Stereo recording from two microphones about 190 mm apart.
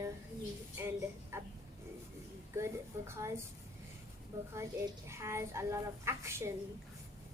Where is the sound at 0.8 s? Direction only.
15° right (ahead or behind).